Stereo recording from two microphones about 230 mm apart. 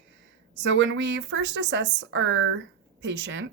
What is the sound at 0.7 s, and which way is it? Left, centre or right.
Speech, right.